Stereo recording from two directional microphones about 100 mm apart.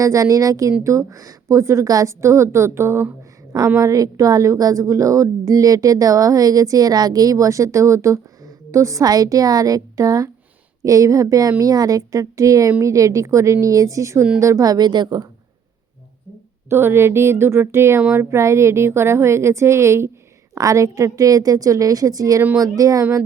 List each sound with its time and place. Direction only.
0.0 s a woman's voice: 35° right (ahead or behind)
16.6 s a woman's voice: 25° right (ahead or behind)